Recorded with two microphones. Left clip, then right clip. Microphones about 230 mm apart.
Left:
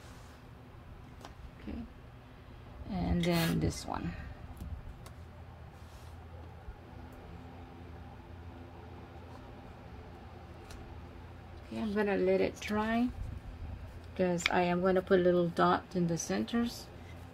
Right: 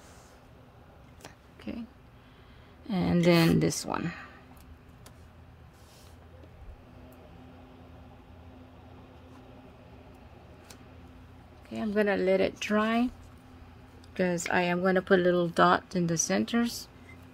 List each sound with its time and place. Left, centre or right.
1.7 s speech: right
2.9 s speech: right
11.7 s speech: right
14.1 s speech: right